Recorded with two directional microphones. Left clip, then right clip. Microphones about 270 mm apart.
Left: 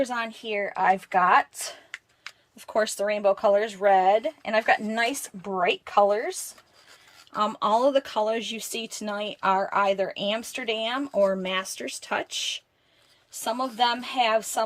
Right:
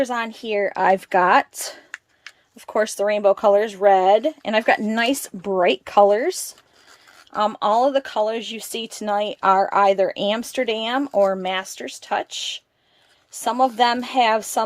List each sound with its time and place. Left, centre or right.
0.0 s speech: centre
2.6 s speech: centre; by 6.3 s right
7.3 s speech: centre